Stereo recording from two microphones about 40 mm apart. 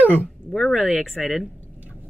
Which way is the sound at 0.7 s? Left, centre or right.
Centre.